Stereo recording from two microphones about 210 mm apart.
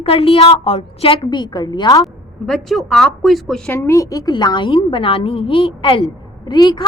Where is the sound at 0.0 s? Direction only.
25° left (ahead or behind).